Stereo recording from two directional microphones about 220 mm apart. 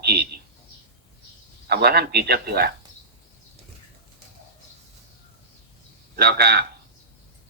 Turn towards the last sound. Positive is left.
turn(degrees=-45)  # may be behind; listen again after turning